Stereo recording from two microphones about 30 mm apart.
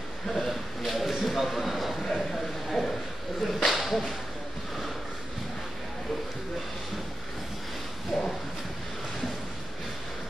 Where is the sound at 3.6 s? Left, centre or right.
Centre.